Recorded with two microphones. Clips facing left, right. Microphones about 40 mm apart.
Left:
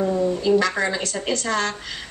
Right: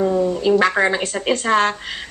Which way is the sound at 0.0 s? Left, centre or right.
Centre.